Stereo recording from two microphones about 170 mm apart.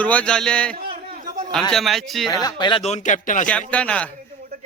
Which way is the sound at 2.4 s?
25° left (ahead or behind).